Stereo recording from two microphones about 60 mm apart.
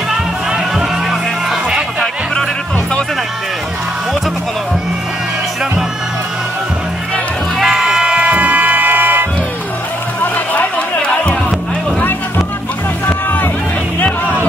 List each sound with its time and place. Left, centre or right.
1.5 s music: centre
7.6 s music: centre; by 9.3 s right
10.2 s music: left
11.0 s music: centre
13.0 s music: left